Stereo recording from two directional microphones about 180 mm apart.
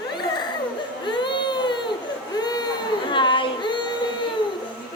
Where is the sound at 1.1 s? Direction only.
25° left (ahead or behind).